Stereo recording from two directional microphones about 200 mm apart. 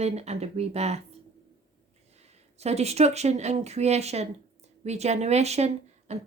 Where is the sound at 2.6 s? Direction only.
30° right (ahead or behind).